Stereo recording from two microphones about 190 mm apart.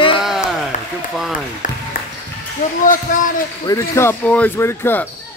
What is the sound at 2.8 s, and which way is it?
Speech, 45° left (ahead or behind).